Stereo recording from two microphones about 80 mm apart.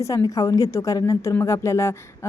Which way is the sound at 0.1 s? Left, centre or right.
Left.